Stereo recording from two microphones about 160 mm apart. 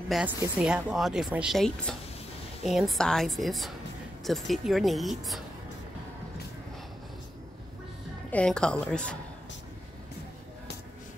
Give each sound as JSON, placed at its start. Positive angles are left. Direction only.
{"t": 0.1, "sound": "speech", "side_deg": -5}
{"t": 8.3, "sound": "speech", "side_deg": 5}